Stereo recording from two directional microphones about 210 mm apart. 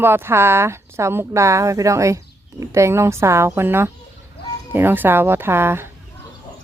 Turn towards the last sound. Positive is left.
turn(degrees=-10)  # may be behind; listen again after turning